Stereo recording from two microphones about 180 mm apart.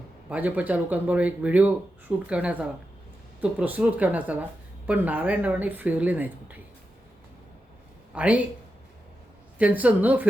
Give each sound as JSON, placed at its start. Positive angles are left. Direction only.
{"t": 0.3, "sound": "speech", "side_deg": -10}
{"t": 8.1, "sound": "speech", "side_deg": -5}
{"t": 9.6, "sound": "speech", "side_deg": -10}